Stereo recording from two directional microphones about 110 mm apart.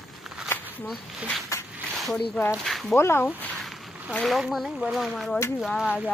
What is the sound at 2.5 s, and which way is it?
Speech, centre (ahead or behind).